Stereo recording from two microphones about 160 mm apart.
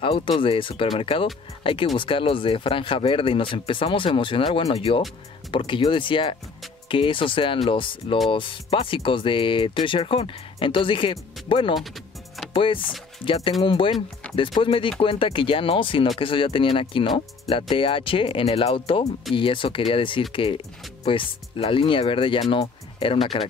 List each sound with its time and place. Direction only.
0.0 s speech: 35° left (ahead or behind)
11.7 s music: centre (ahead or behind)
12.5 s speech: 35° left (ahead or behind)